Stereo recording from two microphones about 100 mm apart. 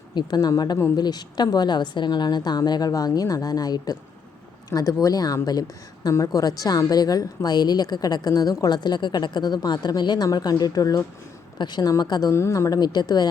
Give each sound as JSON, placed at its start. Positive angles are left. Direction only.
{"t": 0.1, "sound": "a woman's voice", "side_deg": 45}
{"t": 12.3, "sound": "a woman's voice", "side_deg": 30}